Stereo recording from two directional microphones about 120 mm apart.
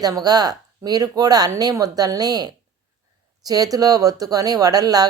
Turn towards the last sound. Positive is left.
turn(degrees=-35)  # may be behind; listen again after turning